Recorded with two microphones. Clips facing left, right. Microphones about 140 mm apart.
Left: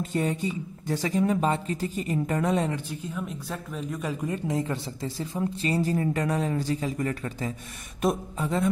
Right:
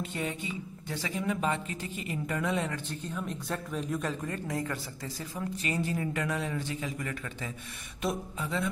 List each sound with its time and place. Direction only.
0.0 s speech: 40° left (ahead or behind)
2.7 s speech: 10° left (ahead or behind)
4.1 s speech: 10° left (ahead or behind)
4.5 s speech: 20° left (ahead or behind); by 8.6 s 45° left (ahead or behind)